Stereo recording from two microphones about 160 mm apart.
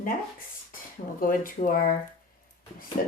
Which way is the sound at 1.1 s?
60° left (ahead or behind).